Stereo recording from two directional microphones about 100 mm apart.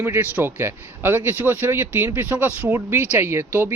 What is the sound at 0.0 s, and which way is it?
Speech, 25° right (ahead or behind).